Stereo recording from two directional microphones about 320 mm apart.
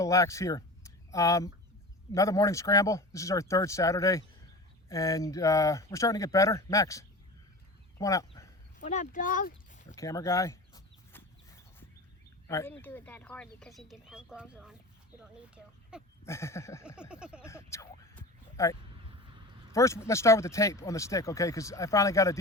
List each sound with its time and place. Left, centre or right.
0.0 s speech: centre
7.9 s a sound: centre
8.8 s speech: left
9.9 s a sound: centre
12.5 s speech: centre
16.2 s speech: centre
16.8 s speech: centre
17.4 s a sound: centre
19.7 s speech: centre